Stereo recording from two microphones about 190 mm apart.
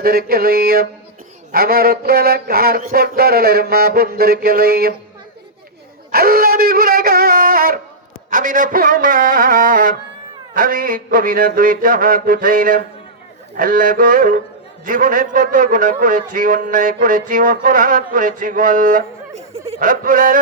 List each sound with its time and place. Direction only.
0.0 s a man's voice: 50° right (ahead or behind)
6.1 s a sound: 50° right (ahead or behind)
8.3 s a man's voice: 45° right (ahead or behind)